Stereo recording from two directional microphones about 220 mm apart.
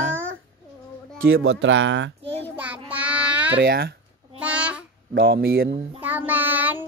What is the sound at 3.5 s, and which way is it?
Speech, 45° right (ahead or behind).